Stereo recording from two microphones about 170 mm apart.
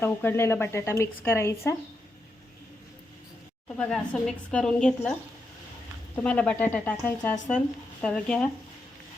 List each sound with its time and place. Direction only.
0.0 s speech: 15° left (ahead or behind)
3.8 s a woman's voice: 5° left (ahead or behind)
6.1 s a woman's voice: 5° left (ahead or behind)